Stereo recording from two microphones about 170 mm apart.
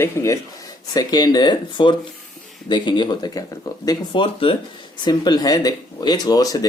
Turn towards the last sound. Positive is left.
turn(degrees=20)  # may be behind; listen again after turning